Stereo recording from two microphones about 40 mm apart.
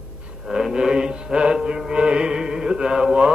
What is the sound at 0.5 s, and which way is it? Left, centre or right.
Mantra, centre.